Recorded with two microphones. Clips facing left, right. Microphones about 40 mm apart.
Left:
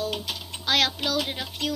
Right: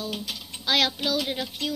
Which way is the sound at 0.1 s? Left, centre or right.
Left.